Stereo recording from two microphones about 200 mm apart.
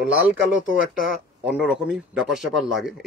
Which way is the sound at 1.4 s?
5° right (ahead or behind).